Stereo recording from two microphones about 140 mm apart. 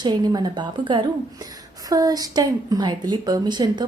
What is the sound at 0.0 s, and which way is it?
A woman's voice, 30° right (ahead or behind).